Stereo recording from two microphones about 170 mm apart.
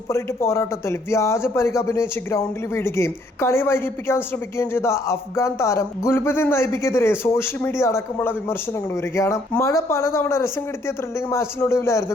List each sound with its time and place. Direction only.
0.1 s speech: 15° left (ahead or behind)